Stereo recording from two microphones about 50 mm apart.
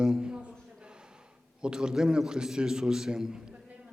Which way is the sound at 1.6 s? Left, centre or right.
Centre.